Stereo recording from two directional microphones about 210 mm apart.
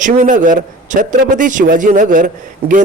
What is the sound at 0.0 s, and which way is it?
A man's voice, 40° right (ahead or behind).